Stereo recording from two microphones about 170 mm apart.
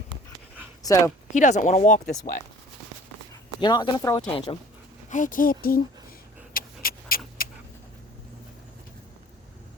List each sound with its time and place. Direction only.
0.8 s speech: 20° left (ahead or behind)
1.3 s speech: 45° left (ahead or behind)
2.0 s speech: 60° left (ahead or behind)
3.6 s speech: 25° left (ahead or behind)
5.0 s speech: 50° left (ahead or behind)
6.5 s a sound: 55° left (ahead or behind)